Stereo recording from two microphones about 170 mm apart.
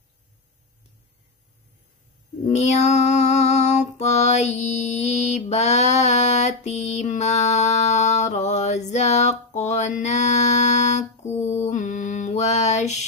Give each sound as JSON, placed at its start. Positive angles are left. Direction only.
{"t": 2.4, "sound": "female singing", "side_deg": 40}